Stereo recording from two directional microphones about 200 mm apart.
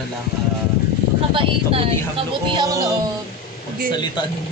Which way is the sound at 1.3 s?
25° right (ahead or behind).